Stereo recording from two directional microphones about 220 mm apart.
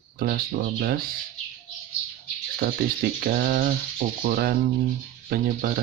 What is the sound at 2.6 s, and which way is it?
Speech, 40° right (ahead or behind).